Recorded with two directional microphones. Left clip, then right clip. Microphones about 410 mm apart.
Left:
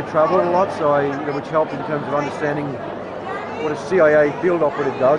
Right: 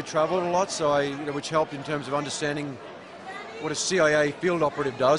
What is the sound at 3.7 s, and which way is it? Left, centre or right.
Speech, right.